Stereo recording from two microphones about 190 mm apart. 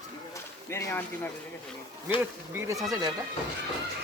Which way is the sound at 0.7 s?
15° left (ahead or behind).